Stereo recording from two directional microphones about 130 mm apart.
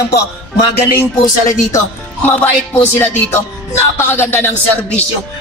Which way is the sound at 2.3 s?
15° left (ahead or behind).